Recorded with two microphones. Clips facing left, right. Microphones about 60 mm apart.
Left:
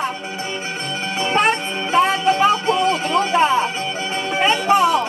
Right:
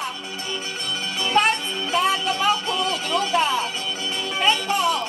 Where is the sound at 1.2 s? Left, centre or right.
Left.